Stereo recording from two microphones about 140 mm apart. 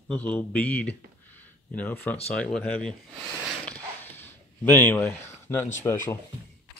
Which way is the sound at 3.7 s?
15° left (ahead or behind).